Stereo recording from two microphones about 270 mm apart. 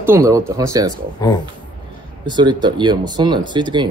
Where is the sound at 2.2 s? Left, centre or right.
Centre.